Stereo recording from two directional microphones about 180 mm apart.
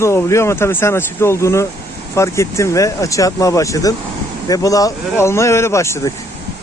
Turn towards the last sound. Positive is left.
turn(degrees=15)  # may be behind; listen again after turning